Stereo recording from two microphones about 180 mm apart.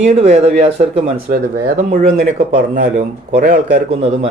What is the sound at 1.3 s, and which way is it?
Speech, 55° right (ahead or behind).